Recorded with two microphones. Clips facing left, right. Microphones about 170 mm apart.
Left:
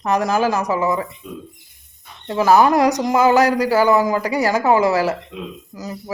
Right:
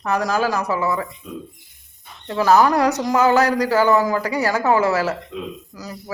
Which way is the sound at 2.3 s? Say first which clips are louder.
Left 2 dB; 15° left (ahead or behind).